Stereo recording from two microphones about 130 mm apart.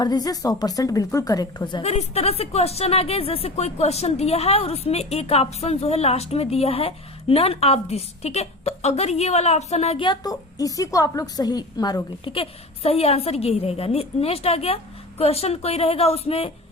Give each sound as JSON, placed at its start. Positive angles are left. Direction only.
{"t": 0.0, "sound": "a woman's voice", "side_deg": 30}
{"t": 1.8, "sound": "a woman's voice", "side_deg": 55}
{"t": 10.1, "sound": "a woman's voice", "side_deg": 30}
{"t": 12.3, "sound": "a woman's voice", "side_deg": 50}